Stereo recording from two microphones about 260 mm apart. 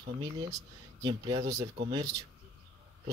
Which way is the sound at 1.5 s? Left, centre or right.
Right.